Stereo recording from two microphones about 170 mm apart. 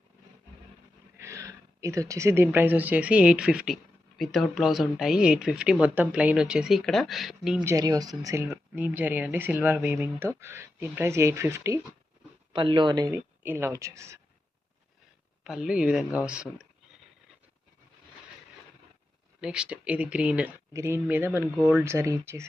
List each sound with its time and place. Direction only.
1.2 s speech: 15° right (ahead or behind); by 7.6 s centre (ahead or behind)
7.6 s speech: 20° right (ahead or behind)
12.5 s speech: 30° right (ahead or behind)
13.4 s speech: 10° right (ahead or behind)
15.4 s speech: 5° right (ahead or behind)
19.4 s speech: 5° right (ahead or behind)